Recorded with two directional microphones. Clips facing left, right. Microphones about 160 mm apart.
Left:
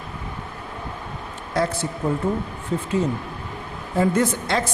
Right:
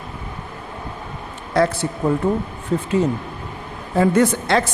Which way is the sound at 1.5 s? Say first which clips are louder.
Right 5 dB; 70° right (ahead or behind).